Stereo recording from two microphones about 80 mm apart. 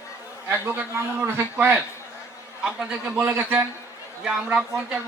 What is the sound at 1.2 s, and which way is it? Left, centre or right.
Speech, right.